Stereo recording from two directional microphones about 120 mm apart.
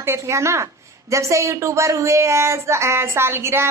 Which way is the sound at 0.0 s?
20° right (ahead or behind).